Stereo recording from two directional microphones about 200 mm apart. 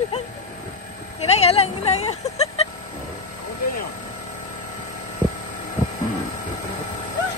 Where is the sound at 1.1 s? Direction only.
30° left (ahead or behind).